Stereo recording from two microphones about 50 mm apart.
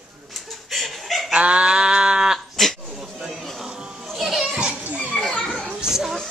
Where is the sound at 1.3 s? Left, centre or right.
Right.